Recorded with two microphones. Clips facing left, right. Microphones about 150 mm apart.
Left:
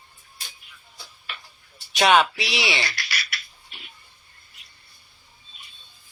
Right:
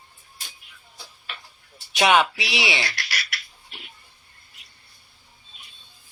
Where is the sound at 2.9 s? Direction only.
75° right (ahead or behind).